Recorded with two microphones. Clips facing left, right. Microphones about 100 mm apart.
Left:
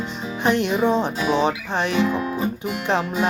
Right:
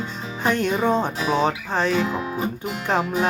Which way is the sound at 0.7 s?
50° right (ahead or behind).